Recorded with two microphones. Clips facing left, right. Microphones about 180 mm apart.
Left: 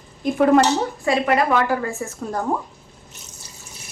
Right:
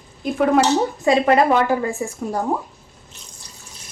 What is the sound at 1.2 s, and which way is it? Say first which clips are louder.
A woman's voice: right 1 dB; 25° right (ahead or behind).